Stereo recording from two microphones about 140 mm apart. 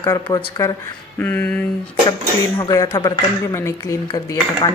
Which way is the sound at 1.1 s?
10° left (ahead or behind).